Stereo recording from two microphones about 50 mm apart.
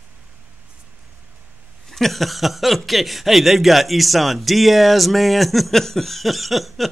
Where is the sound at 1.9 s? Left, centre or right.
Centre.